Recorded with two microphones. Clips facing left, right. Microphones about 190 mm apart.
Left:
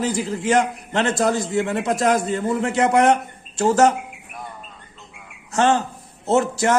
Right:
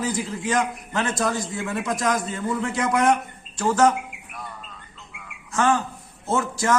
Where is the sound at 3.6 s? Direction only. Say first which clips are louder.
Left 3 dB; 25° left (ahead or behind).